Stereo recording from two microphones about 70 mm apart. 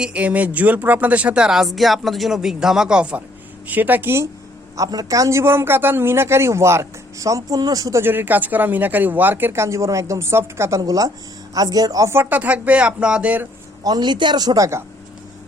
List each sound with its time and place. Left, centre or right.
0.0 s speech: centre
4.8 s a man's voice: right
5.4 s speech: right
8.0 s speech: right
10.8 s speech: right
12.0 s speech: right
13.8 s speech: right